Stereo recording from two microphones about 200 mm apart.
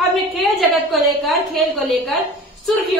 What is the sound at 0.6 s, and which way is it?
A woman's voice, centre (ahead or behind).